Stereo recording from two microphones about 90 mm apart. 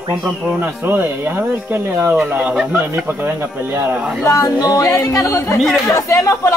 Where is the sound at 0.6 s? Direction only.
25° right (ahead or behind).